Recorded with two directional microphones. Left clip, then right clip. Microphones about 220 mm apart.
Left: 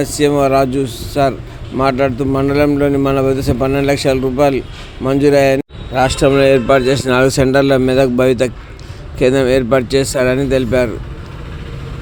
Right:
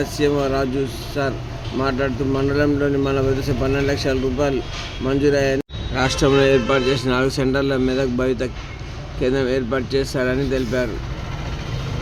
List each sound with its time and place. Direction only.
0.0 s a man's voice: 35° left (ahead or behind)
5.9 s a man's voice: 20° left (ahead or behind)